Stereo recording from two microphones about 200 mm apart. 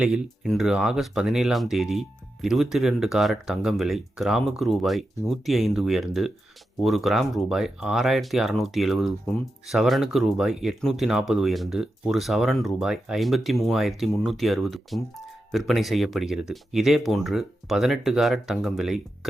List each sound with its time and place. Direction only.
0.0 s speech: centre (ahead or behind)